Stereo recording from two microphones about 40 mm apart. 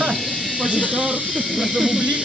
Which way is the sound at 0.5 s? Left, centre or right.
Right.